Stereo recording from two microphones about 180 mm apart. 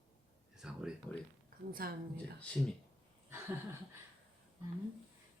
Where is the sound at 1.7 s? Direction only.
55° right (ahead or behind).